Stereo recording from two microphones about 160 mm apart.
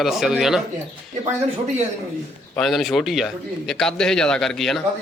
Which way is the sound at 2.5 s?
Centre (ahead or behind).